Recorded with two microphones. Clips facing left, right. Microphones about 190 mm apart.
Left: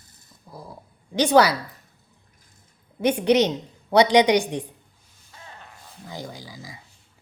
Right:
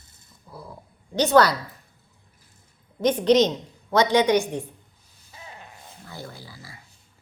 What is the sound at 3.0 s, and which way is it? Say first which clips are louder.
A woman's voice: right 1 dB; 10° left (ahead or behind).